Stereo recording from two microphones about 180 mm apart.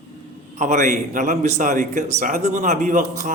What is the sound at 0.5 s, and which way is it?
A man's voice, 40° right (ahead or behind).